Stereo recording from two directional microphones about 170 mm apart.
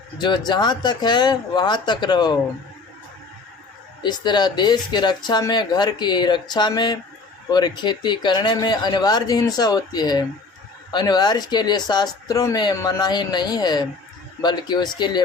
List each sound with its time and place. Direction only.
0.2 s speech: 25° left (ahead or behind)
4.0 s speech: 25° left (ahead or behind)